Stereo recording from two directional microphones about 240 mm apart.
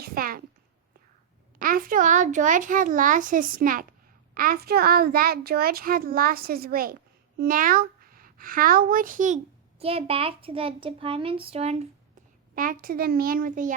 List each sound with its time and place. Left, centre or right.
0.0 s a child's voice: right
1.5 s a child's voice: right
12.5 s a child's voice: right